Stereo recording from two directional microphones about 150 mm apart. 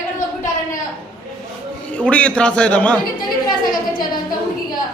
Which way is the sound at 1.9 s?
10° left (ahead or behind).